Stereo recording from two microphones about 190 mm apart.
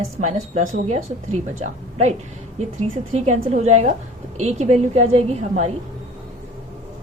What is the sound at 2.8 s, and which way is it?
A woman's voice, 35° right (ahead or behind).